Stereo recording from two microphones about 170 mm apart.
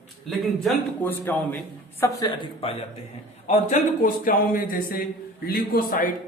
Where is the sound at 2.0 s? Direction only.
25° left (ahead or behind).